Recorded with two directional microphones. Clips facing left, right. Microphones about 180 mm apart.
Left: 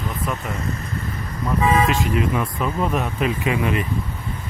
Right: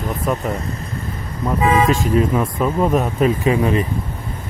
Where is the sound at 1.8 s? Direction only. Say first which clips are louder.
Right 4 dB; 45° right (ahead or behind).